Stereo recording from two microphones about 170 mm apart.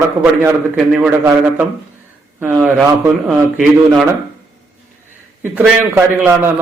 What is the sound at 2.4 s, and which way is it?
Speech, 15° right (ahead or behind).